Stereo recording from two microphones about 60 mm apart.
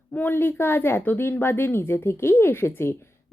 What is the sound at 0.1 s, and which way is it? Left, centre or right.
Speech, left.